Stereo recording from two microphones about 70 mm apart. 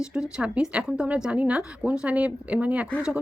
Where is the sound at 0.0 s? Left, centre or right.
Centre.